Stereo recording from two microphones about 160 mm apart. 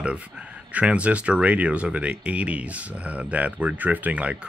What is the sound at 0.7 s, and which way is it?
Speech, 10° right (ahead or behind).